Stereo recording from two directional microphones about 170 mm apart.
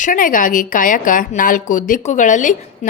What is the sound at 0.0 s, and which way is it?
A woman's voice, 55° left (ahead or behind).